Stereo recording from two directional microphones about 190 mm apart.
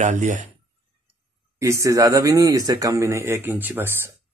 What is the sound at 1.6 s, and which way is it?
Speech, 15° right (ahead or behind).